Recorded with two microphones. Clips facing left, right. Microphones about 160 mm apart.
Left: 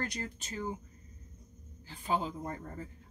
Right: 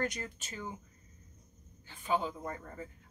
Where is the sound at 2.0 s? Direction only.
35° left (ahead or behind).